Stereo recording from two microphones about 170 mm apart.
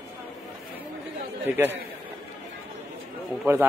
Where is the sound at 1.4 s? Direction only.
10° right (ahead or behind).